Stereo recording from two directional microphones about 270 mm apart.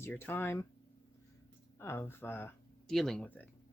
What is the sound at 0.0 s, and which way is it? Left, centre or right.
Speech, centre.